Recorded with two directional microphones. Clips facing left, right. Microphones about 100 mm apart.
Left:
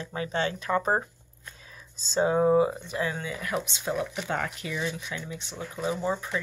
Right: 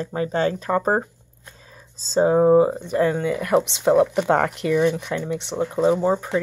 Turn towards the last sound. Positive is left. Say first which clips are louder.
# right 10 dB
turn(degrees=-40)  # may be behind; listen again after turning